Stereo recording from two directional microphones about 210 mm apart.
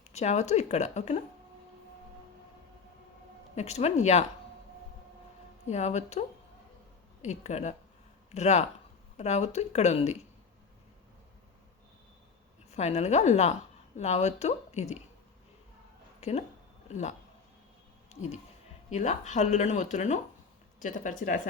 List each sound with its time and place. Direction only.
0.1 s speech: 30° left (ahead or behind)
3.5 s speech: 30° left (ahead or behind)
5.6 s speech: 35° left (ahead or behind)
12.7 s speech: 30° left (ahead or behind)
16.2 s speech: 30° left (ahead or behind)